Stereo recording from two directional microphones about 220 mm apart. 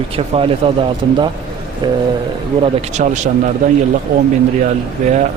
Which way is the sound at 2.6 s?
35° right (ahead or behind).